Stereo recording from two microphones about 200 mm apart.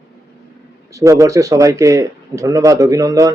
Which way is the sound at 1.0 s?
15° right (ahead or behind).